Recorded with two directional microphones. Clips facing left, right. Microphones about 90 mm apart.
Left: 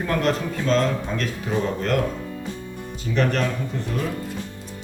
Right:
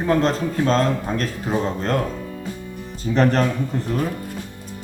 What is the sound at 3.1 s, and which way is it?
Speech, 35° right (ahead or behind).